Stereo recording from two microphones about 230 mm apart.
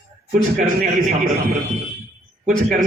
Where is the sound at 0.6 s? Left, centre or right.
Right.